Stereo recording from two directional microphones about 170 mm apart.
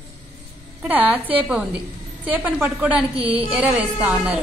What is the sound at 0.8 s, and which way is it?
A woman's voice, 10° right (ahead or behind).